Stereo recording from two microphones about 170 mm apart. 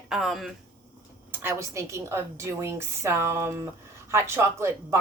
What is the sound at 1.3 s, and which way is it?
A woman's voice, 15° right (ahead or behind).